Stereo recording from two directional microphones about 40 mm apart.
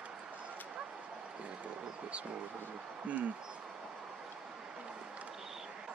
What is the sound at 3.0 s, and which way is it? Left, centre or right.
Speech, right.